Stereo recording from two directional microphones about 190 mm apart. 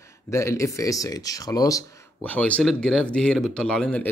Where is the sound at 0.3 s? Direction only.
15° left (ahead or behind).